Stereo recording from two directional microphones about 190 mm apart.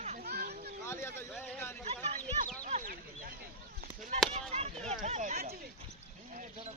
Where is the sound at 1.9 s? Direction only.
35° right (ahead or behind).